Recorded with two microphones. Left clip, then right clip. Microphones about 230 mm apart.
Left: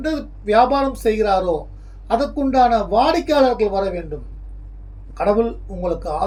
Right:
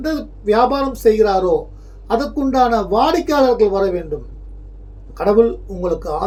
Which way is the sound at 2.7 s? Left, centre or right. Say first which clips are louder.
Right 1 dB; centre.